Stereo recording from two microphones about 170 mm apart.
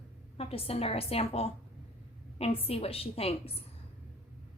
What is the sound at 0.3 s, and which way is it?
A woman's voice, 35° left (ahead or behind).